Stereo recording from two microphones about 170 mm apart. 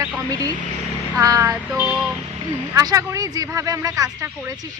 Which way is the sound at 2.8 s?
20° right (ahead or behind).